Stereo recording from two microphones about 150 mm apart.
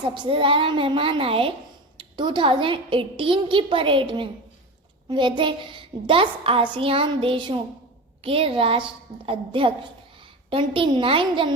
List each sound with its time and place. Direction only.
0.1 s a woman's voice: 35° right (ahead or behind)